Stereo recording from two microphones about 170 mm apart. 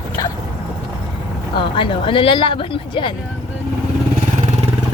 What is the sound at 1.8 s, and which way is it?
Speech, 30° left (ahead or behind).